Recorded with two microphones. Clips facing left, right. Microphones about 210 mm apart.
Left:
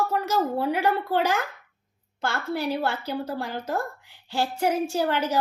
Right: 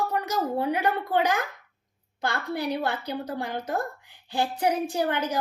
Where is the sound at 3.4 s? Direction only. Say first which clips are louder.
Even; 15° right (ahead or behind).